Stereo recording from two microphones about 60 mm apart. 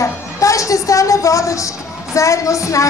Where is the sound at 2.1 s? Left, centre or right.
Left.